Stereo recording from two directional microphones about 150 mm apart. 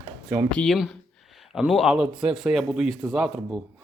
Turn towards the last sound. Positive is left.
turn(degrees=-5)  # may be behind; listen again after turning